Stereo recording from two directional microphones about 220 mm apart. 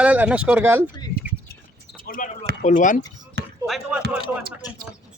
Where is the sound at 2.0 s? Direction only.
40° left (ahead or behind).